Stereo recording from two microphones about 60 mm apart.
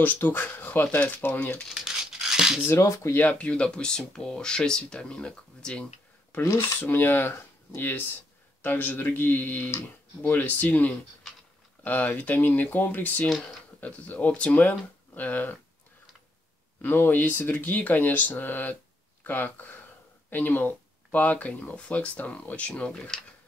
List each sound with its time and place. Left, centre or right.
0.0 s speech: left
1.7 s tearing: centre
3.2 s speech: left
6.8 s speech: left
16.8 s speech: left; by 23.2 s centre